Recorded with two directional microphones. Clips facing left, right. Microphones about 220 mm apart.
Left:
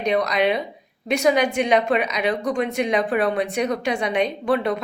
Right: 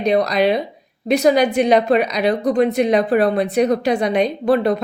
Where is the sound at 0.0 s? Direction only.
35° right (ahead or behind).